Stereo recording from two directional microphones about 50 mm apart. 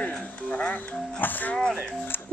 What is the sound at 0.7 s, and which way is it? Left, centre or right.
Music, left.